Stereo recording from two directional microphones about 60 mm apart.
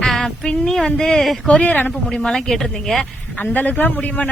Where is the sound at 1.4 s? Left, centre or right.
Left.